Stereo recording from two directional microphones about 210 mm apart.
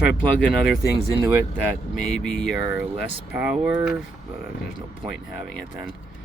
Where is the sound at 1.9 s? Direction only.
5° left (ahead or behind).